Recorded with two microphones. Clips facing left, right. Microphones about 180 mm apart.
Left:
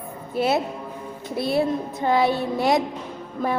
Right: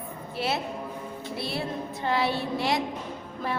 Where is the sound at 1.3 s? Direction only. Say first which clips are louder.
Left 11 dB; 45° left (ahead or behind).